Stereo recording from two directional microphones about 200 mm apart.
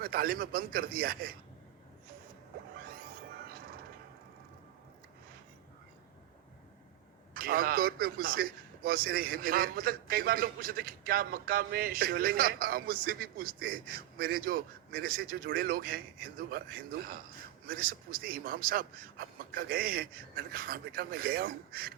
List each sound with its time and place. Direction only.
0.0 s a man's voice: 50° right (ahead or behind)
7.3 s a man's voice: 45° right (ahead or behind)